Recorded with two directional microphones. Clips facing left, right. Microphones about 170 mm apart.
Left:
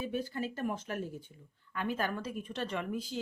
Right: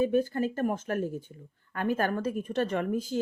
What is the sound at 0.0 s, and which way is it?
Speech, 50° right (ahead or behind).